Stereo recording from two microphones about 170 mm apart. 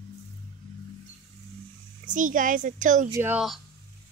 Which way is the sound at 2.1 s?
50° right (ahead or behind).